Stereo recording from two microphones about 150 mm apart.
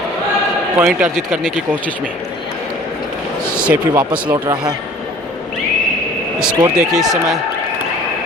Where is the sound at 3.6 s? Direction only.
10° right (ahead or behind).